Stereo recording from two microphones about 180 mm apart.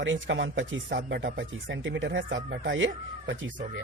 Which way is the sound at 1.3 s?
85° right.